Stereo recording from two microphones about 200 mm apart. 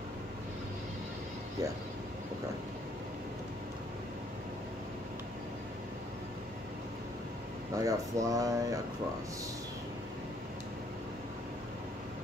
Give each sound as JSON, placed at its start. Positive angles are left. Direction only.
{"t": 7.7, "sound": "speech", "side_deg": -15}